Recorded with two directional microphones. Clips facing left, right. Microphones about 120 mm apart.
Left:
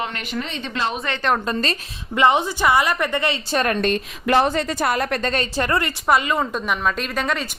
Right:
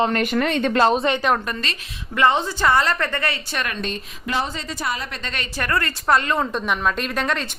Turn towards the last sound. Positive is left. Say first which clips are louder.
# even
turn(degrees=0)  # may be behind; listen again after turning